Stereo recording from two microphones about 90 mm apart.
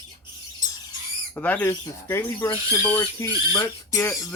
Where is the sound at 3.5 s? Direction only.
50° left (ahead or behind).